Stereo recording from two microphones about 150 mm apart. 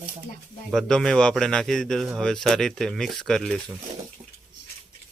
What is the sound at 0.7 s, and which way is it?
A man's voice, 5° left (ahead or behind).